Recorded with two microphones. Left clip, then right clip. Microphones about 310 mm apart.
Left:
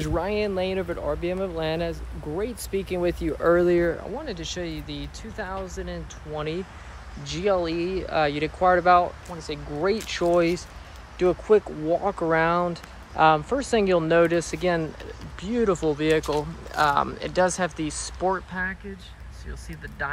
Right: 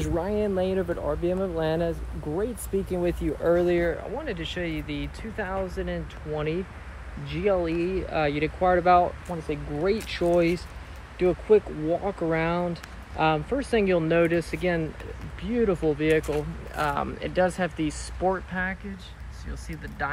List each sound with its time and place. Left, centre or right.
0.0 s speech: centre
0.4 s speech: centre
3.3 s speech: left
4.3 s speech: centre